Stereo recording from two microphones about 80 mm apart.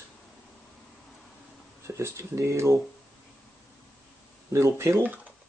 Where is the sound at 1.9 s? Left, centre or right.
Right.